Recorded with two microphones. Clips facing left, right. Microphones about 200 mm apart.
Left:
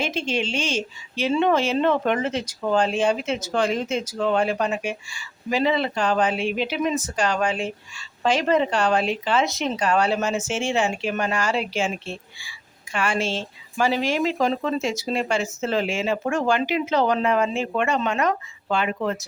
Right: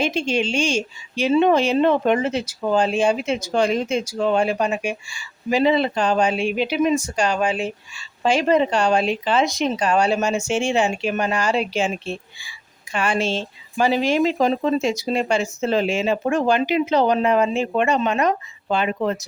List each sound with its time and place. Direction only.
0.0 s a woman's voice: 15° right (ahead or behind)